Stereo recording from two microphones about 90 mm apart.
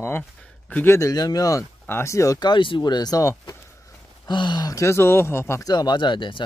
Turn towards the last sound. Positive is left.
turn(degrees=65)  # may be behind; listen again after turning